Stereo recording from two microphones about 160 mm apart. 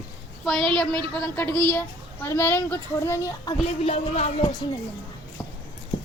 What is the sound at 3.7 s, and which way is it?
Music, 40° left (ahead or behind).